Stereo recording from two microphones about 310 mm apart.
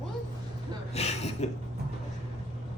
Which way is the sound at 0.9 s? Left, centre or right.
Left.